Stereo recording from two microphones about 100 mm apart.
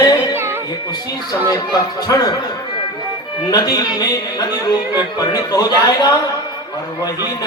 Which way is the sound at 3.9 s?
40° left (ahead or behind).